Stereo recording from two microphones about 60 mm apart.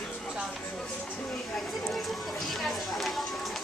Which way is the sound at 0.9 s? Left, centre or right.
Left.